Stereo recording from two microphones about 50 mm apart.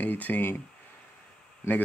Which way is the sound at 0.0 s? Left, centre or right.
Left.